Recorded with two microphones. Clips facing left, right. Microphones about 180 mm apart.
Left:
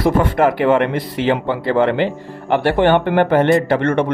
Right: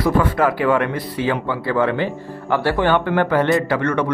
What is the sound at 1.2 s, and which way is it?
Speech, 25° left (ahead or behind).